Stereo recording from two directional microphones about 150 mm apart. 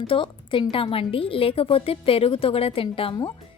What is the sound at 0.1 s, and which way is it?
A woman's voice, 35° left (ahead or behind).